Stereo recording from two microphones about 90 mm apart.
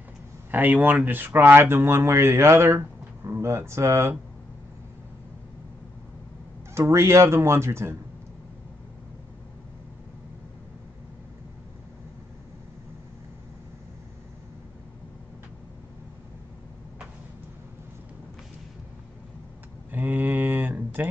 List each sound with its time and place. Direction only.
0.5 s speech: 20° right (ahead or behind)
6.7 s speech: 30° right (ahead or behind)
19.9 s a sound: 20° right (ahead or behind)